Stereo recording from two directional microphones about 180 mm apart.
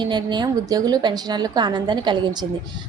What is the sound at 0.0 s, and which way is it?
A woman's voice, 25° right (ahead or behind).